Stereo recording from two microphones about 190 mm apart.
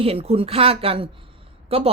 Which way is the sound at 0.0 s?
30° right (ahead or behind).